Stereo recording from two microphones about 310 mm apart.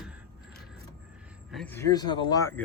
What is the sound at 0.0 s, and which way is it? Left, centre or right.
Mechanisms, centre.